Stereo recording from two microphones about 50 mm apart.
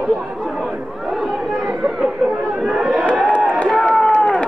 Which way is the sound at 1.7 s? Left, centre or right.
Centre.